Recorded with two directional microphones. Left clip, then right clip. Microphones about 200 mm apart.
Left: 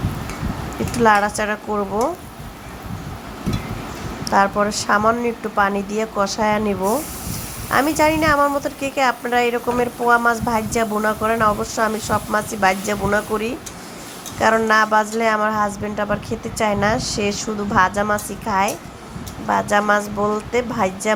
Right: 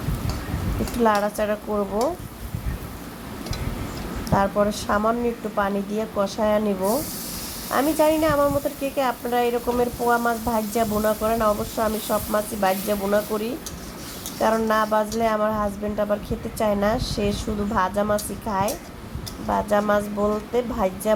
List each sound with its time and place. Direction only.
0.9 s a woman's voice: 15° left (ahead or behind)
4.3 s a woman's voice: 20° left (ahead or behind)